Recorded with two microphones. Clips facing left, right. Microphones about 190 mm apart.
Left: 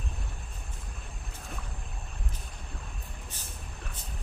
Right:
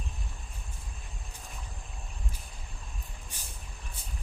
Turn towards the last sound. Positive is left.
turn(degrees=-15)  # may be behind; listen again after turning